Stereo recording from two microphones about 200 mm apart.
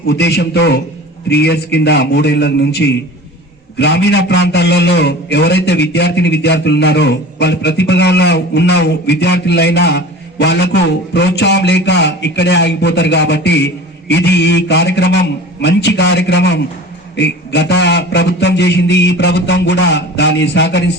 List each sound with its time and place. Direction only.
0.1 s a man's voice: 55° left (ahead or behind)